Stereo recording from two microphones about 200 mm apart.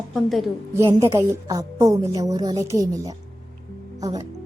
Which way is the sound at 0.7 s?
15° right (ahead or behind).